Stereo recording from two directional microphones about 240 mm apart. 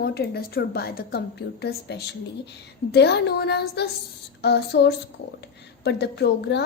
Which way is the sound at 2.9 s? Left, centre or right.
Left.